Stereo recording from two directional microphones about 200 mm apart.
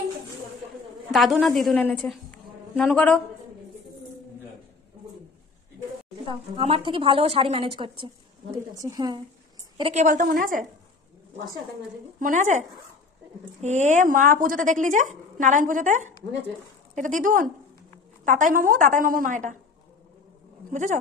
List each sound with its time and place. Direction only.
1.1 s a woman's voice: centre (ahead or behind)
6.2 s a woman's voice: 25° right (ahead or behind)
10.0 s speech: 45° right (ahead or behind)
12.2 s speech: 40° right (ahead or behind)
20.7 s speech: 40° right (ahead or behind)